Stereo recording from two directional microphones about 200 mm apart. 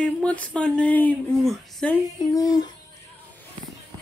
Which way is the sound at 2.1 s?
15° left (ahead or behind).